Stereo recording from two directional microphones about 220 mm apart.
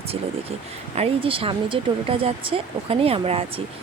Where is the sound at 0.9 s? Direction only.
25° right (ahead or behind).